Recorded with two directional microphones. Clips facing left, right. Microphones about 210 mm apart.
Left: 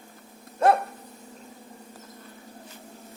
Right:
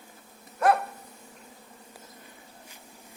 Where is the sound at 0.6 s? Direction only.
25° left (ahead or behind).